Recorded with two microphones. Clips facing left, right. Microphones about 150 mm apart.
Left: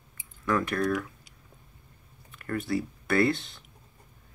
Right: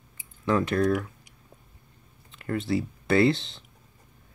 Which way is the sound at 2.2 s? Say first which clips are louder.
Right 3 dB; 25° right (ahead or behind).